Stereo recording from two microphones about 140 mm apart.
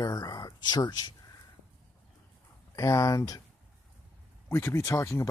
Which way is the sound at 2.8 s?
25° left (ahead or behind).